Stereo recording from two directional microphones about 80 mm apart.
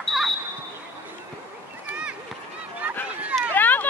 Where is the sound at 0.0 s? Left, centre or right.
Centre.